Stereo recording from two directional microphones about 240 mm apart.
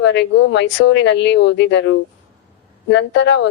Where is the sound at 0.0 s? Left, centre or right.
Left.